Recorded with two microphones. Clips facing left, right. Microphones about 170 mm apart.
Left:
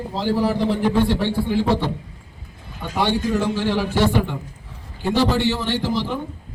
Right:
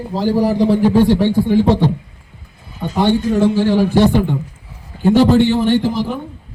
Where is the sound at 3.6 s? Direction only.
45° right (ahead or behind).